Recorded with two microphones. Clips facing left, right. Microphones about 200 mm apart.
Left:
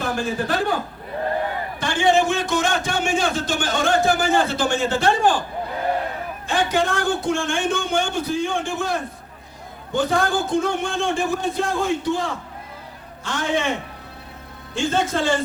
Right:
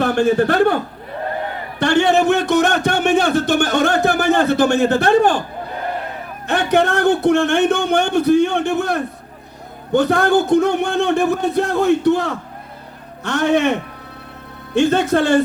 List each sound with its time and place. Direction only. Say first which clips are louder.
0.0 s a man's voice: right 9 dB; 65° right (ahead or behind)
1.8 s a man's voice: right 5 dB; 65° right (ahead or behind)
6.5 s a man's voice: right 5 dB; 65° right (ahead or behind)